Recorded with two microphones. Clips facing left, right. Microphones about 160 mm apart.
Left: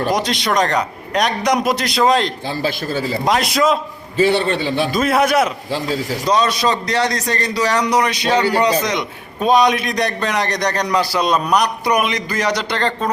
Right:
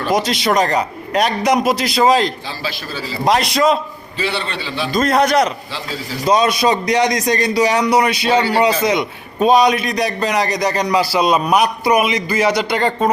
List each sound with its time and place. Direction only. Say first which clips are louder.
0.1 s a man's voice: right 2 dB; centre (ahead or behind)
2.6 s a man's voice: left 6 dB; 50° left (ahead or behind)
3.2 s a man's voice: right 3 dB; centre (ahead or behind)
4.2 s a man's voice: left 7 dB; 45° left (ahead or behind)
4.9 s a man's voice: right 3 dB; 5° left (ahead or behind)
6.2 s a man's voice: right 3 dB; 10° right (ahead or behind)